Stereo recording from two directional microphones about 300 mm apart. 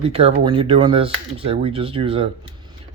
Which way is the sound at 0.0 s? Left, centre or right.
Centre.